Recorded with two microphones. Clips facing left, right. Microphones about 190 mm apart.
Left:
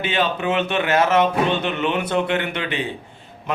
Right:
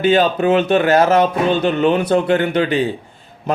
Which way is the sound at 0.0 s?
40° right (ahead or behind).